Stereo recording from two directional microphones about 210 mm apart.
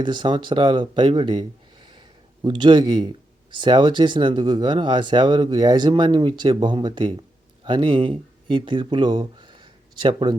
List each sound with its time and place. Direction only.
0.0 s speech: 20° right (ahead or behind)
1.4 s a sound: 20° right (ahead or behind)
3.6 s speech: 20° right (ahead or behind)